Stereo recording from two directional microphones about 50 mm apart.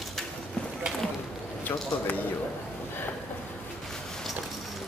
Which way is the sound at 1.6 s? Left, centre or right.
Left.